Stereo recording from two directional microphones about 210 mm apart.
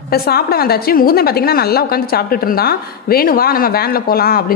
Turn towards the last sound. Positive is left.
turn(degrees=45)  # may be behind; listen again after turning